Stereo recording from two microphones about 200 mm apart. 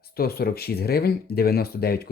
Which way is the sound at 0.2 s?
50° left (ahead or behind).